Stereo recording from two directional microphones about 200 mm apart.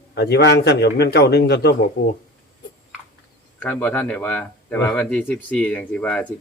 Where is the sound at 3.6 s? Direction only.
5° left (ahead or behind).